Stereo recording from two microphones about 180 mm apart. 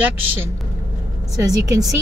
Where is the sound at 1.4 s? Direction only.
20° right (ahead or behind).